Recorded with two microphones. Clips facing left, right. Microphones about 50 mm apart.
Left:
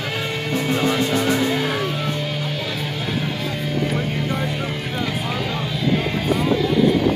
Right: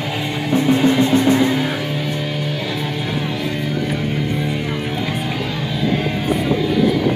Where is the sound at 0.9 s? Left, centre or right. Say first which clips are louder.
Right 4 dB; right.